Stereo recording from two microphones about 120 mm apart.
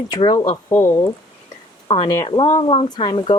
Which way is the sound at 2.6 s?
45° left (ahead or behind).